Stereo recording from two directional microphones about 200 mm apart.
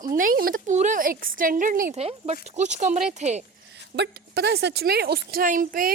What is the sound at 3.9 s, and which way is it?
Speech, 55° right (ahead or behind).